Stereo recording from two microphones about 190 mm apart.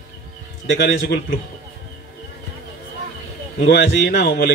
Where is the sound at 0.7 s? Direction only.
70° left (ahead or behind).